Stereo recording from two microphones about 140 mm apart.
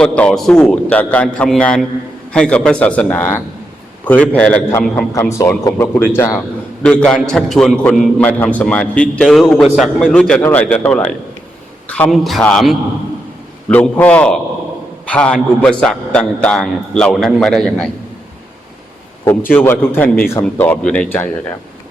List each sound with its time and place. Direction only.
0.2 s a man's voice: 5° left (ahead or behind)
5.4 s speech: 25° left (ahead or behind)
6.8 s a man's voice: 5° left (ahead or behind)
12.1 s a man's voice: centre (ahead or behind)
19.2 s a man's voice: 15° left (ahead or behind)